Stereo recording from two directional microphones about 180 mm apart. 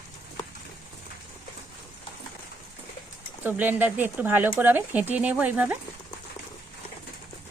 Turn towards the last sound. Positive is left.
turn(degrees=-10)  # may be behind; listen again after turning